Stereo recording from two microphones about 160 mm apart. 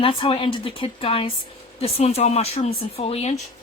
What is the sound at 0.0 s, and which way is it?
Speech, 35° left (ahead or behind).